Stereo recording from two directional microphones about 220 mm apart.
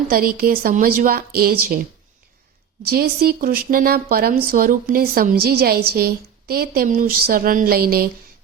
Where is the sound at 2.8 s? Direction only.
45° right (ahead or behind).